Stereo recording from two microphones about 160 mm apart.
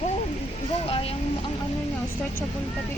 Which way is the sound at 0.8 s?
35° left (ahead or behind).